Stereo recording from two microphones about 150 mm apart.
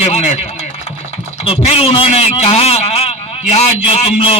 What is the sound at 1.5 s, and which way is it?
A man's voice, 40° left (ahead or behind).